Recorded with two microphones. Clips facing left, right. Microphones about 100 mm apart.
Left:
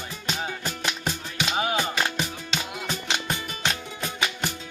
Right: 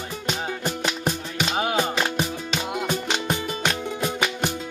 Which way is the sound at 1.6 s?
15° right (ahead or behind).